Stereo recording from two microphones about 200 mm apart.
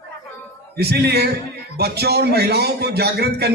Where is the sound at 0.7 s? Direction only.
55° right (ahead or behind).